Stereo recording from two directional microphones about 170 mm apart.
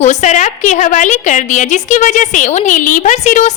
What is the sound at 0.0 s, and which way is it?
A woman's voice, 45° left (ahead or behind).